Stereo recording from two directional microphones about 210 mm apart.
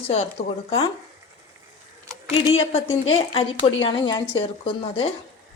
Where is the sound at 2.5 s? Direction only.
30° left (ahead or behind).